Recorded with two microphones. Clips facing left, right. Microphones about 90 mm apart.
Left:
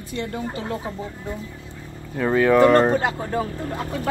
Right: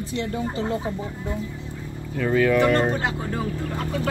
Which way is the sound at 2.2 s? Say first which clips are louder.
Left 3 dB; 35° left (ahead or behind).